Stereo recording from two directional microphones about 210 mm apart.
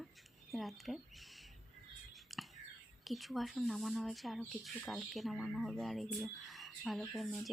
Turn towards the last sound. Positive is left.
turn(degrees=0)  # may be behind; listen again after turning